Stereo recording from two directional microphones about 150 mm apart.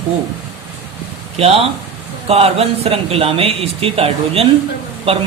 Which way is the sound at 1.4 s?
40° right (ahead or behind).